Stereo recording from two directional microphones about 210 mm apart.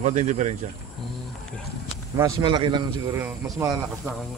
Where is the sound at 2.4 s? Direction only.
20° right (ahead or behind).